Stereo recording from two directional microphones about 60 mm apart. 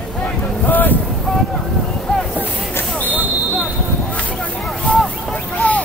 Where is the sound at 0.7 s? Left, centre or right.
Left.